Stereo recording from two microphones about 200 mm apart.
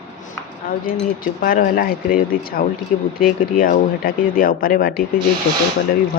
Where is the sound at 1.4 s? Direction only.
45° left (ahead or behind).